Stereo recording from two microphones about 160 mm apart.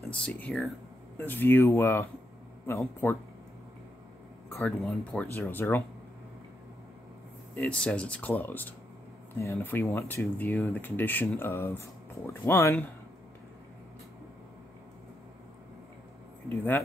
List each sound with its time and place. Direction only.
0.1 s speech: 10° left (ahead or behind)
4.6 s speech: 10° left (ahead or behind)
7.5 s speech: 5° left (ahead or behind)
16.4 s speech: 10° left (ahead or behind)